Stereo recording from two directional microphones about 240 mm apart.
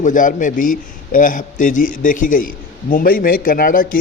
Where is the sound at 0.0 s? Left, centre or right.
Left.